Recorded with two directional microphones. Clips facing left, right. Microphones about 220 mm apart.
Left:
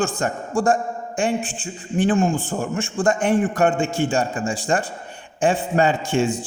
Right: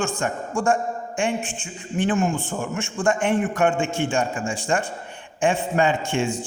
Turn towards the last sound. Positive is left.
turn(degrees=35)  # may be behind; listen again after turning